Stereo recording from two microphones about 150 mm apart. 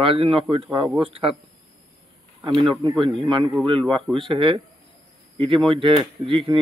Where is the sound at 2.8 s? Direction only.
35° right (ahead or behind).